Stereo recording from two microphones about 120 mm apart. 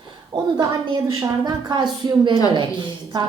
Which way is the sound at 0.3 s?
35° right (ahead or behind).